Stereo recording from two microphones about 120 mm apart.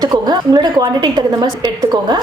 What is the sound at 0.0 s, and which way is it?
A woman's voice, 35° right (ahead or behind).